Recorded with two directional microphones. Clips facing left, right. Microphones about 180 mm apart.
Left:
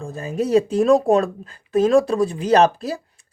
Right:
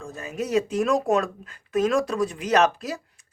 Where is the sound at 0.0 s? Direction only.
30° left (ahead or behind).